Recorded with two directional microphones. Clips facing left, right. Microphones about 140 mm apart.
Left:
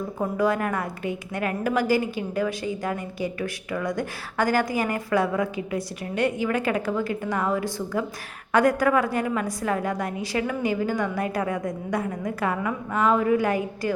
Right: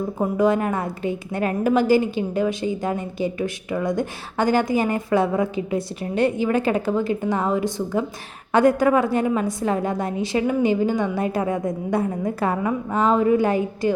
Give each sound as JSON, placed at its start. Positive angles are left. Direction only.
{"t": 0.2, "sound": "a woman's voice", "side_deg": -20}